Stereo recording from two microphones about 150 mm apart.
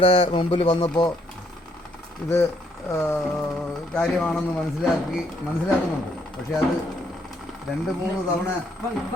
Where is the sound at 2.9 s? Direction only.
15° left (ahead or behind).